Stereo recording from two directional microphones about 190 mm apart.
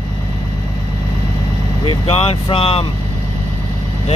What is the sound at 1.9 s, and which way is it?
Speech, 30° left (ahead or behind).